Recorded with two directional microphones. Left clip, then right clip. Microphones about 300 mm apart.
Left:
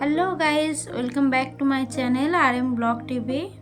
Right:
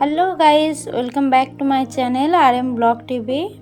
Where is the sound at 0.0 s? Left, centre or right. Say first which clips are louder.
Right 8 dB; centre.